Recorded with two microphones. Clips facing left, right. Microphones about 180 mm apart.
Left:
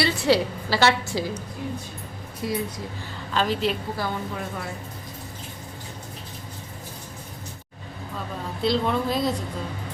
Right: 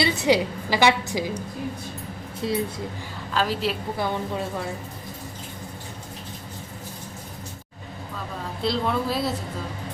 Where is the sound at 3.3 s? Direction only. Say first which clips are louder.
Left 1 dB; 5° right (ahead or behind).